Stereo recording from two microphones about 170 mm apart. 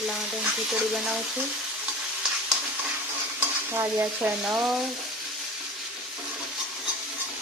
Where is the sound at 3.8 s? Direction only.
15° right (ahead or behind).